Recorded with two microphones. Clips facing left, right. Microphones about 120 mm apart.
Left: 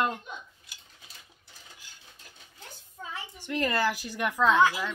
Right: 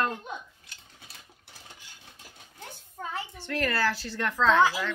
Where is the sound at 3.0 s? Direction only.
55° right (ahead or behind).